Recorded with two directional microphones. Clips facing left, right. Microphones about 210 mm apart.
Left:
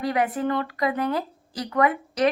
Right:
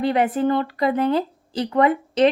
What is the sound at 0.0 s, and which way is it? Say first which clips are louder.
A woman's voice: right 5 dB; 25° right (ahead or behind).